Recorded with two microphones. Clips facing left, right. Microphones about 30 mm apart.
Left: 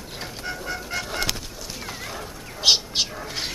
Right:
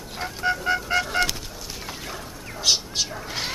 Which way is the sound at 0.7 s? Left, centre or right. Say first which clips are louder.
Right 7 dB; right.